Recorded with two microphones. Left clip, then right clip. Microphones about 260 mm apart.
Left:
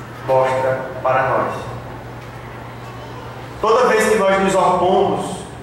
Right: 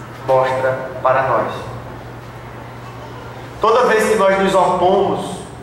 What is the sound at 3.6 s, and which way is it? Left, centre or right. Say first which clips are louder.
Speech: right 1 dB; centre.